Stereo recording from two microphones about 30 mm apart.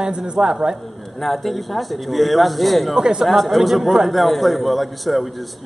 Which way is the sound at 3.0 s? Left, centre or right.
Right.